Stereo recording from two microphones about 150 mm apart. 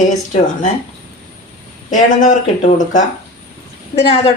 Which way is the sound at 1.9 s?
55° left (ahead or behind).